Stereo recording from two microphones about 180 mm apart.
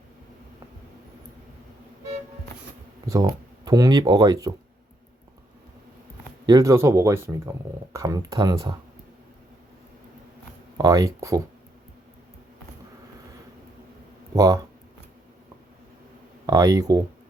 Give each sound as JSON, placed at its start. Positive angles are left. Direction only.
{"t": 3.1, "sound": "speech", "side_deg": -20}
{"t": 6.4, "sound": "speech", "side_deg": -20}
{"t": 10.8, "sound": "speech", "side_deg": -20}
{"t": 14.3, "sound": "speech", "side_deg": -20}
{"t": 16.5, "sound": "speech", "side_deg": -20}